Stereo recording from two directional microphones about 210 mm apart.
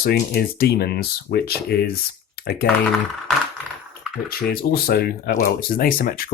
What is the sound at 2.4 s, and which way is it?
Typing, 45° left (ahead or behind).